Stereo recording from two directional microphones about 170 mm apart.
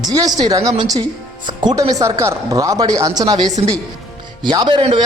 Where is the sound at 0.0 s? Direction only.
20° right (ahead or behind).